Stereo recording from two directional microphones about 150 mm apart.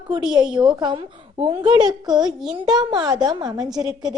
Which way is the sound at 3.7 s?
5° right (ahead or behind).